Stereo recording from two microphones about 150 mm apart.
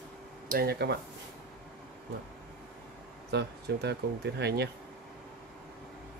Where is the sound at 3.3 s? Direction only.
90° right.